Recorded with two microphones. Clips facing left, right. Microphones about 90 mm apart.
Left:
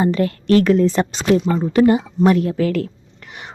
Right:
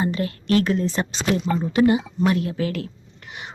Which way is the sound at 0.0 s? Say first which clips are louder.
Left 6 dB; 40° left (ahead or behind).